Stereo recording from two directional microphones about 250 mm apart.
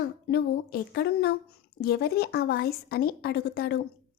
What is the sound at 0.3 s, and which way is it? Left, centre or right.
A woman's voice, left.